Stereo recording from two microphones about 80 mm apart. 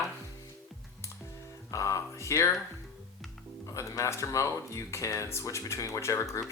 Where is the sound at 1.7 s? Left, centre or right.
Left.